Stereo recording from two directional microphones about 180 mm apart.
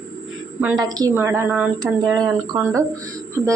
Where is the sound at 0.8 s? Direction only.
20° right (ahead or behind).